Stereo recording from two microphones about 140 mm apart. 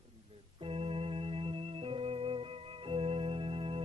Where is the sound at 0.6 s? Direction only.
40° right (ahead or behind).